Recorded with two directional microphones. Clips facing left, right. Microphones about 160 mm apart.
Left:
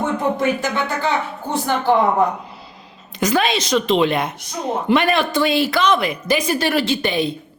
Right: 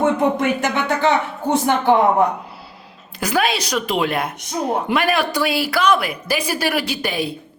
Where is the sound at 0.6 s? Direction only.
20° right (ahead or behind).